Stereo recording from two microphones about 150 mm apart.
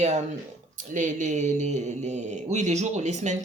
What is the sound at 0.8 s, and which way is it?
Speech, 60° right (ahead or behind).